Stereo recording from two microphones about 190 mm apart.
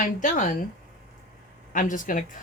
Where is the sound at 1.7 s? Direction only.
45° left (ahead or behind).